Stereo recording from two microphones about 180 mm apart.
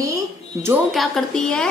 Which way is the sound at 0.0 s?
15° right (ahead or behind).